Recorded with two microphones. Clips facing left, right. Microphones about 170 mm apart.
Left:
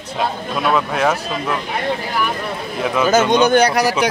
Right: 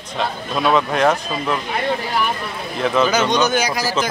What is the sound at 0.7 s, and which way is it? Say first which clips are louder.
Speech: right 1 dB; 5° left (ahead or behind).